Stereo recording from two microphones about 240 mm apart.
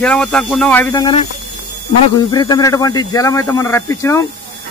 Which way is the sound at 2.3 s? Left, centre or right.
Centre.